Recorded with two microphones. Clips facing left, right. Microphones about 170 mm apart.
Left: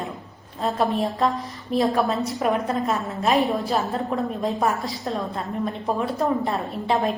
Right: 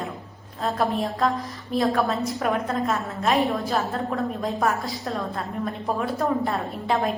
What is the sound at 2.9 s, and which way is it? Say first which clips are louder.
Speech: left 1 dB; centre (ahead or behind).